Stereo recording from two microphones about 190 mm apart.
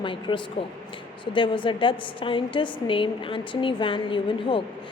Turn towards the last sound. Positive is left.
turn(degrees=25)  # may be behind; listen again after turning